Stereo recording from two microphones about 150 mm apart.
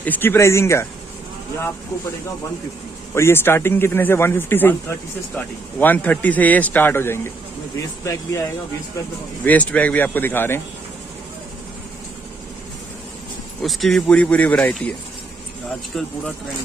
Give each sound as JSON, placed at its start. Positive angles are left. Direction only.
{"t": 0.0, "sound": "speech", "side_deg": 15}
{"t": 3.2, "sound": "speech", "side_deg": 15}
{"t": 9.4, "sound": "speech", "side_deg": 10}
{"t": 13.6, "sound": "speech", "side_deg": 0}